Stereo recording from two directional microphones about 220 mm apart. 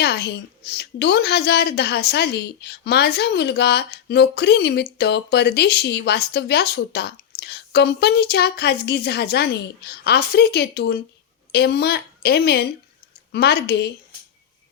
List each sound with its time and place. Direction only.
0.0 s a woman's voice: 50° left (ahead or behind)